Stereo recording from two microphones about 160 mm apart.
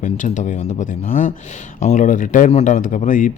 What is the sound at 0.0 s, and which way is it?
Speech, 55° left (ahead or behind).